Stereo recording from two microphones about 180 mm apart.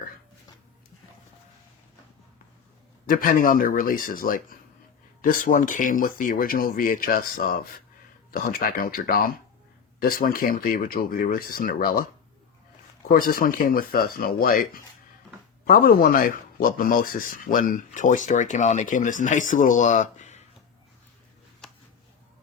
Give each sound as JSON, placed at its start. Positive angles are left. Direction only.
{"t": 3.1, "sound": "speech", "side_deg": 50}
{"t": 13.1, "sound": "speech", "side_deg": 50}
{"t": 21.6, "sound": "a sound", "side_deg": 5}